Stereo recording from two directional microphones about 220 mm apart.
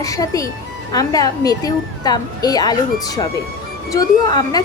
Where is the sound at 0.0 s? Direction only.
15° left (ahead or behind).